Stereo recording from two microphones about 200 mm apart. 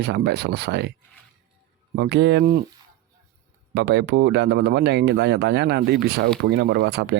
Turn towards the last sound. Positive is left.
turn(degrees=-55)  # may be behind; listen again after turning